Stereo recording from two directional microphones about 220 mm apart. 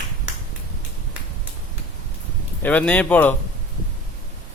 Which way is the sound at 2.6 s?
5° left (ahead or behind).